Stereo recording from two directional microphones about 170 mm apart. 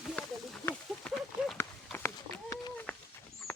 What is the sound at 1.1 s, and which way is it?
Horse, 5° left (ahead or behind).